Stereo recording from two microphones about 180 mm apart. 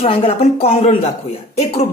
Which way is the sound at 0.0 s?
30° left (ahead or behind).